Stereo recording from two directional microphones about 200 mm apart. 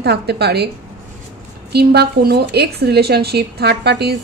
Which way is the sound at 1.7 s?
55° right (ahead or behind).